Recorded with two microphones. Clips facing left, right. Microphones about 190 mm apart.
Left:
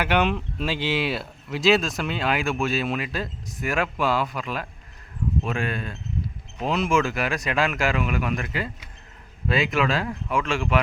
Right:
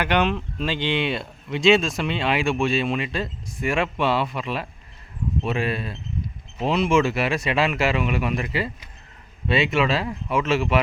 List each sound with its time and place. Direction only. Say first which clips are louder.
0.0 s speech: right 1 dB; 5° left (ahead or behind)